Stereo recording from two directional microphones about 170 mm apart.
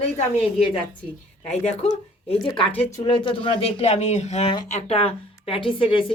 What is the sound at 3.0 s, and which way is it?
Speech, 30° left (ahead or behind).